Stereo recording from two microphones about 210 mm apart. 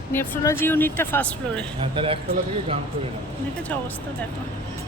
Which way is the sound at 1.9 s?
25° right (ahead or behind).